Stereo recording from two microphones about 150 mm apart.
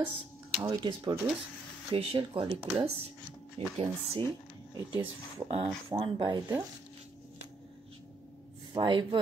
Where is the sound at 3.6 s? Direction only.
45° right (ahead or behind).